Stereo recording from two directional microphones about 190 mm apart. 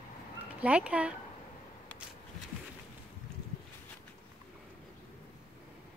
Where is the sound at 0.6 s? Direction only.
5° right (ahead or behind).